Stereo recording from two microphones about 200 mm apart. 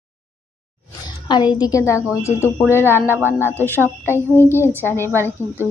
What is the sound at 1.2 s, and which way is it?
A woman's voice, 20° left (ahead or behind).